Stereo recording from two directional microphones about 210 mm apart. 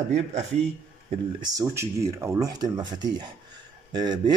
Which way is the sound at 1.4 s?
15° right (ahead or behind).